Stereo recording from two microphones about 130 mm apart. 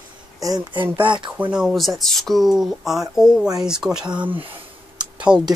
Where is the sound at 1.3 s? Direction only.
10° right (ahead or behind).